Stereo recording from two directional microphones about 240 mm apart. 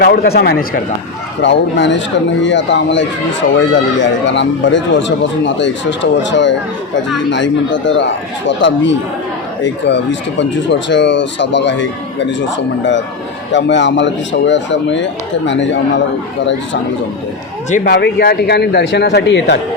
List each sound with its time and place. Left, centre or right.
0.0 s speech: left
13.5 s speech: left
17.7 s speech: left